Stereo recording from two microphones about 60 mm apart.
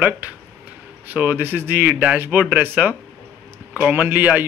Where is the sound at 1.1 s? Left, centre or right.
Right.